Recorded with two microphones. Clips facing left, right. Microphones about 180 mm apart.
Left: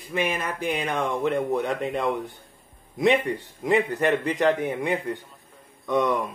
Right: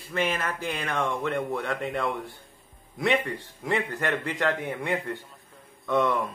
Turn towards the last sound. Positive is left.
turn(degrees=15)  # may be behind; listen again after turning